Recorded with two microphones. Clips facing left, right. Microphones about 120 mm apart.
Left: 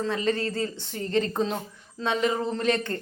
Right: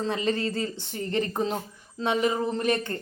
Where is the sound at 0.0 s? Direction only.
20° right (ahead or behind).